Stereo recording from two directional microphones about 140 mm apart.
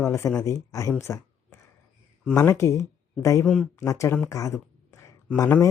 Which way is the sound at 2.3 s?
20° left (ahead or behind).